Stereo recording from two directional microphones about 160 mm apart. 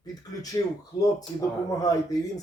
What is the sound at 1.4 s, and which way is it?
Speech, 20° left (ahead or behind).